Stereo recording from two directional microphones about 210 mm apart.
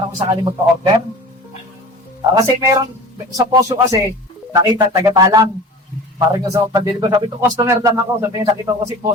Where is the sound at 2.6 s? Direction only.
15° right (ahead or behind).